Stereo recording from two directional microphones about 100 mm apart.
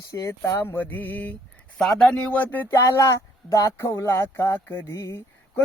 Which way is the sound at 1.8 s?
5° left (ahead or behind).